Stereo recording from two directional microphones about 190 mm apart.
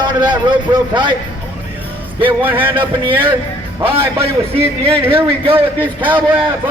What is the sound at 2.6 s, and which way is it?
Speech, 25° right (ahead or behind).